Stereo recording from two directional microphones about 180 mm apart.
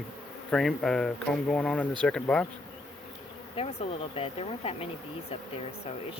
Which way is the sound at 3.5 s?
35° left (ahead or behind).